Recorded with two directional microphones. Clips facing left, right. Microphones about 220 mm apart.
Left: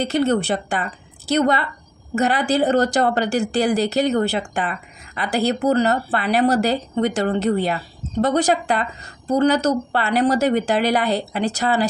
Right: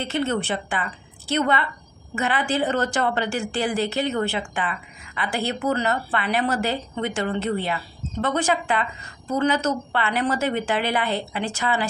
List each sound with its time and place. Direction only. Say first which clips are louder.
0.0 s a woman's voice: left 6 dB; 40° left (ahead or behind)